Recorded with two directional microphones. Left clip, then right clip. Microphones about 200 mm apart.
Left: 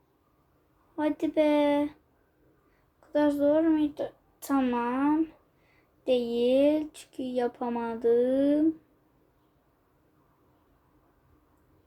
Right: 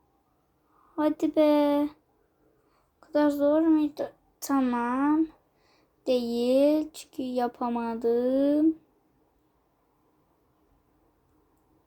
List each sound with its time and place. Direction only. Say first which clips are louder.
0.9 s speech: right 2 dB; 35° right (ahead or behind)
3.1 s speech: right 1 dB; 30° right (ahead or behind)